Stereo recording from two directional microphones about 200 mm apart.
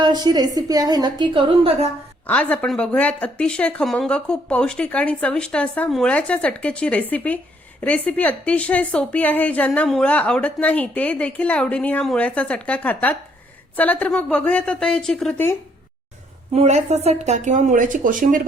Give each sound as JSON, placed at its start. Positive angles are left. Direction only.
{"t": 0.0, "sound": "a woman's voice", "side_deg": -20}
{"t": 2.2, "sound": "a woman's voice", "side_deg": 10}
{"t": 16.6, "sound": "speech", "side_deg": -35}